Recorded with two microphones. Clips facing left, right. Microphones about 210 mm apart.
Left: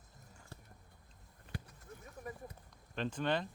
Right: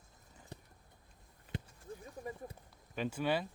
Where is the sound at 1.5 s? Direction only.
25° right (ahead or behind).